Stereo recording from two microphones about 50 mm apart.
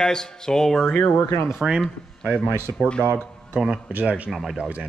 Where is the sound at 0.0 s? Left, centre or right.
Centre.